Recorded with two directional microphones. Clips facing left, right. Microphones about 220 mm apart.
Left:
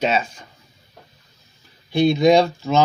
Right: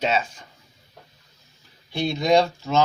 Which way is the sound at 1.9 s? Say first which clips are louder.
Left 9 dB; 60° left (ahead or behind).